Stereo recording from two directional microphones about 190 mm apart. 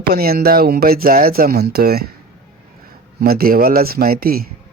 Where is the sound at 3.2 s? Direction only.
55° right (ahead or behind).